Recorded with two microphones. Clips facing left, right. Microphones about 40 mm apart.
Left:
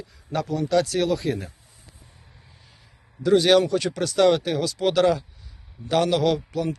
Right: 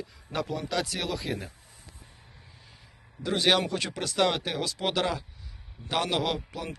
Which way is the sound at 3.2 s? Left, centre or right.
Right.